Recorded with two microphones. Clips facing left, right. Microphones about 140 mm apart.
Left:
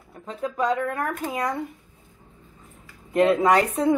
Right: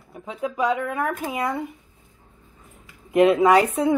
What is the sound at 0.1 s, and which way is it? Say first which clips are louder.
Speech: right 1 dB; 10° right (ahead or behind).